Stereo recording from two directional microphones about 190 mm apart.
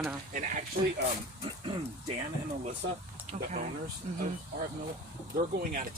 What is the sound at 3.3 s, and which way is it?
Speech, 40° right (ahead or behind).